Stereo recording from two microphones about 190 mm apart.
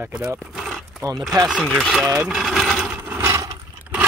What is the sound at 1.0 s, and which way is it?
Speech, 20° right (ahead or behind).